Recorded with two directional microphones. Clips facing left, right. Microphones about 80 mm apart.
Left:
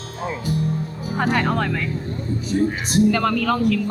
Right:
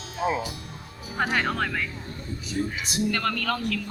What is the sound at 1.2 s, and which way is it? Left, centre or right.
Speech, centre.